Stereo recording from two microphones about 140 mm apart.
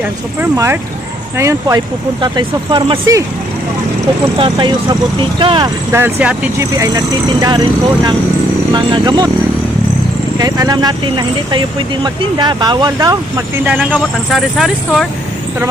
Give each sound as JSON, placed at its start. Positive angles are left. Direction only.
{"t": 0.5, "sound": "speech", "side_deg": -20}
{"t": 2.2, "sound": "speech", "side_deg": -35}
{"t": 4.4, "sound": "speech", "side_deg": -35}
{"t": 5.9, "sound": "speech", "side_deg": -15}
{"t": 6.7, "sound": "speech", "side_deg": -25}
{"t": 10.3, "sound": "speech", "side_deg": -25}
{"t": 13.7, "sound": "speech", "side_deg": -5}